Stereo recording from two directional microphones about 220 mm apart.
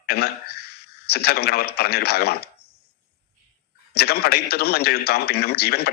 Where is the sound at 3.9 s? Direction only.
45° left (ahead or behind).